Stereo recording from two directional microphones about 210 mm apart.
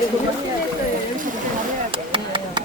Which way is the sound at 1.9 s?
25° right (ahead or behind).